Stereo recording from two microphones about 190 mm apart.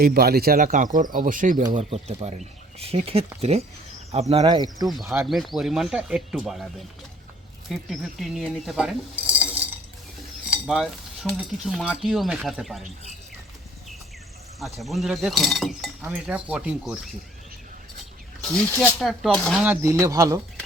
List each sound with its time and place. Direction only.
0.0 s speech: 50° right (ahead or behind); by 4.9 s 20° right (ahead or behind)
5.2 s speech: centre (ahead or behind)
10.5 s speech: centre (ahead or behind)
14.6 s speech: centre (ahead or behind)
18.4 s speech: 5° left (ahead or behind)
19.6 s speech: 10° right (ahead or behind)